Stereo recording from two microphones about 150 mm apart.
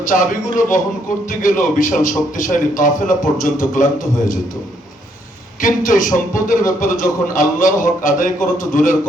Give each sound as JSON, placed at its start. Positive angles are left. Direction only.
{"t": 0.1, "sound": "a man's voice", "side_deg": 60}
{"t": 5.5, "sound": "a man's voice", "side_deg": 60}